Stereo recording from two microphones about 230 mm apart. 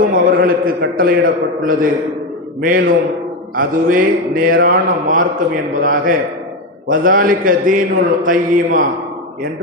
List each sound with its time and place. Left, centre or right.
0.0 s a man's voice: right